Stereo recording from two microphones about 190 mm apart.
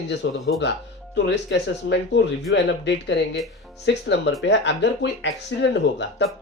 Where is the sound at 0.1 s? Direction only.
70° left (ahead or behind).